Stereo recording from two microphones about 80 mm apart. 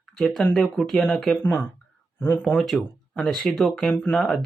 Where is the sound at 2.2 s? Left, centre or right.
Left.